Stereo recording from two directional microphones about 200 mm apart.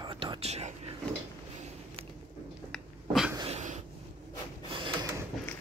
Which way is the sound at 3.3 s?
30° right (ahead or behind).